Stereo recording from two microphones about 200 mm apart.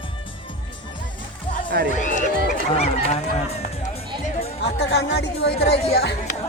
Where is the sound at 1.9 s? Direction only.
40° left (ahead or behind).